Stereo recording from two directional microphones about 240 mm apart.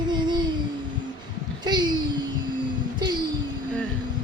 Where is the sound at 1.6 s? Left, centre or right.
Centre.